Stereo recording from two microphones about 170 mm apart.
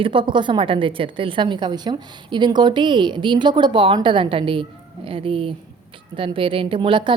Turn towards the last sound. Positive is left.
turn(degrees=-30)  # may be behind; listen again after turning